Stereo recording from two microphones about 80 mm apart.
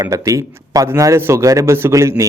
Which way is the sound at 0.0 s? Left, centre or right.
Right.